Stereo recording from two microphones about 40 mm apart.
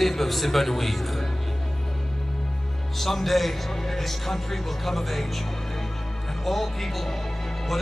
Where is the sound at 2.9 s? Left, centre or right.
Centre.